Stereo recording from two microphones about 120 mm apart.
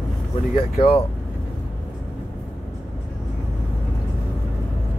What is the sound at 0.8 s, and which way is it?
Speech, 50° left (ahead or behind).